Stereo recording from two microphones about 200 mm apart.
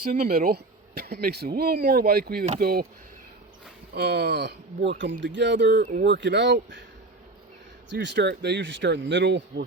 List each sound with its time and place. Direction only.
0.3 s speech: 45° right (ahead or behind)
3.9 s speech: 55° right (ahead or behind)
5.8 s speech: 50° right (ahead or behind)
7.9 s speech: 60° right (ahead or behind)